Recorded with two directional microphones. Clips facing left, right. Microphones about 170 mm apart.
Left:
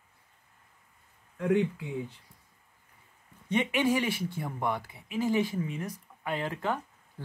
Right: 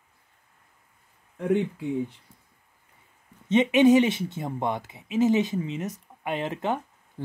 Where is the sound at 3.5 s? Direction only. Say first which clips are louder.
Right 9 dB; 20° right (ahead or behind).